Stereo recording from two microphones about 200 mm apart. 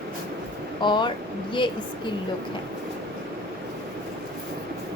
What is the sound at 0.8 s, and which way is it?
Speech, 25° left (ahead or behind).